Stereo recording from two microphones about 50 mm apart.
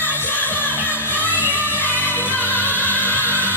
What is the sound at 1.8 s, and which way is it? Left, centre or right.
Music, left.